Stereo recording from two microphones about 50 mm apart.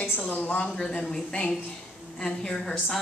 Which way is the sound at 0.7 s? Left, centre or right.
Centre.